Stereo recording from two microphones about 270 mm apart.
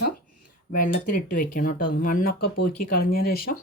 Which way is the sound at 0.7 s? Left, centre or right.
Left.